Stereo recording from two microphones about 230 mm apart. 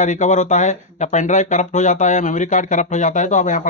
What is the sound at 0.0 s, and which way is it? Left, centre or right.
Speech, left.